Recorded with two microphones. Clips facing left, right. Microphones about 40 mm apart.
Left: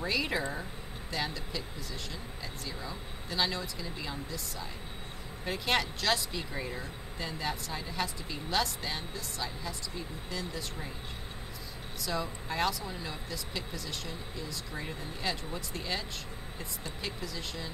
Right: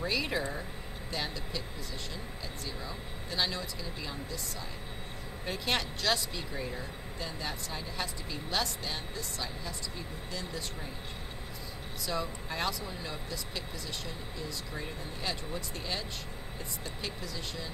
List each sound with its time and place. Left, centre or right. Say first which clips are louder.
0.0 s speech: left 1 dB; centre
2.6 s speech: even; centre
12.0 s speech: even; centre